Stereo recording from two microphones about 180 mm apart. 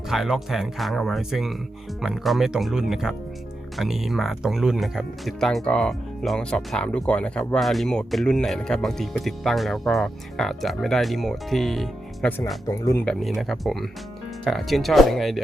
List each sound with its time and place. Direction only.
0.1 s speech: centre (ahead or behind)
12.6 s speech: 15° left (ahead or behind)
13.1 s speech: centre (ahead or behind)